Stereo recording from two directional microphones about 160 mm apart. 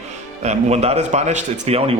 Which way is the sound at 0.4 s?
40° right (ahead or behind).